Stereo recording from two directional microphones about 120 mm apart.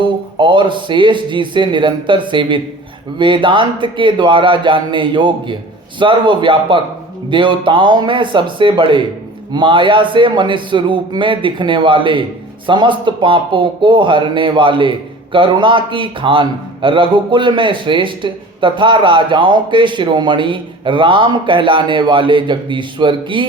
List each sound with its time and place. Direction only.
0.0 s speech: 45° right (ahead or behind)